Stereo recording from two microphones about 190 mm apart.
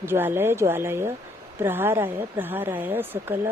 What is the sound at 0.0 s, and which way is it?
A woman's voice, 10° right (ahead or behind).